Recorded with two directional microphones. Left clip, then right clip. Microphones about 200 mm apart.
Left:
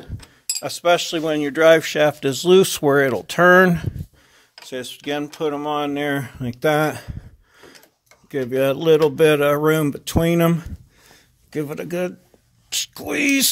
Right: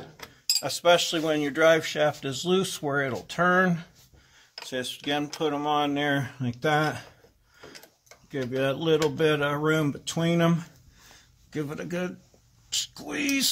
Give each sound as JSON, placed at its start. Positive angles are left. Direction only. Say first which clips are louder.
{"t": 0.6, "sound": "speech", "louder": "left 4 dB", "side_deg": 35}
{"t": 8.3, "sound": "speech", "louder": "left 8 dB", "side_deg": 40}